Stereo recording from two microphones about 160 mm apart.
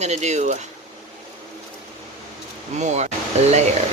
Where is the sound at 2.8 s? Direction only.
45° right (ahead or behind).